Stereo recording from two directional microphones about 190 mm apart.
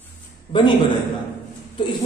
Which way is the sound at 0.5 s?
25° left (ahead or behind).